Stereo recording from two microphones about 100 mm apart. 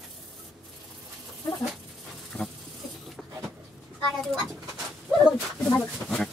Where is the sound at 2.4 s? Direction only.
15° left (ahead or behind).